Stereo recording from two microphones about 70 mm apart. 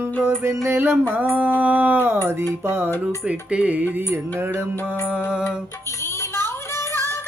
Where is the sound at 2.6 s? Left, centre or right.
Right.